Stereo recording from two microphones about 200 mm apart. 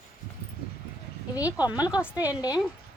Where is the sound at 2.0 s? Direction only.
10° left (ahead or behind).